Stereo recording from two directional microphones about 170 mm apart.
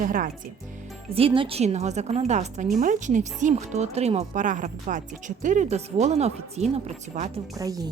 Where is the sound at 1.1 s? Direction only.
35° right (ahead or behind).